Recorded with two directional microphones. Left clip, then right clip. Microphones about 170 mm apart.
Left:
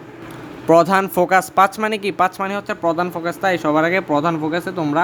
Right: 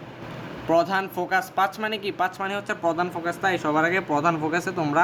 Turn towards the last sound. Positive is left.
turn(degrees=20)  # may be behind; listen again after turning